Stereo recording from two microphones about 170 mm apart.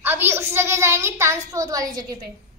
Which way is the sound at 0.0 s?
10° right (ahead or behind).